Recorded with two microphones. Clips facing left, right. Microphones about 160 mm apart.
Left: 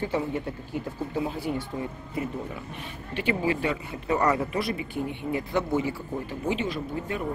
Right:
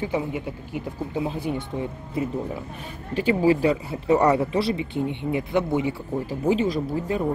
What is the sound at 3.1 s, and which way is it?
Speech, 35° right (ahead or behind).